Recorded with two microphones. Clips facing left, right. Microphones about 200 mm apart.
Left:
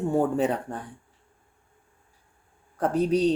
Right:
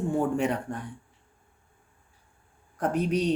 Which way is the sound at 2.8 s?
30° left (ahead or behind).